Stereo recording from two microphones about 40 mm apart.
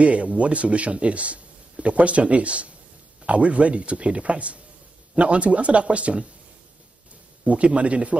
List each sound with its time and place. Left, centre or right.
0.0 s speech: right
7.4 s speech: right